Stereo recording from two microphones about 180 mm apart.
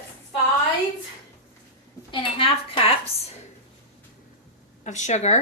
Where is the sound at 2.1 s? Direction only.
30° left (ahead or behind).